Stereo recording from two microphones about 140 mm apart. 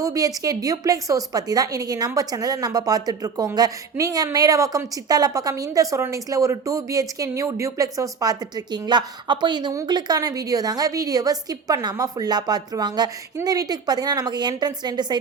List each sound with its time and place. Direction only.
0.0 s a woman's voice: 25° right (ahead or behind)